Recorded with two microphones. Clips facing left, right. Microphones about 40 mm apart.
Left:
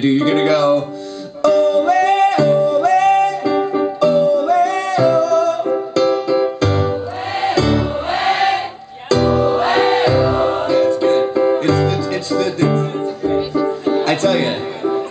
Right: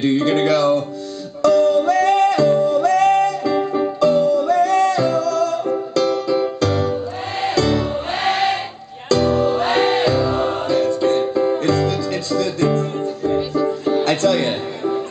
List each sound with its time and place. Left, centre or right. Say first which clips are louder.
0.0 s music: left 2 dB; centre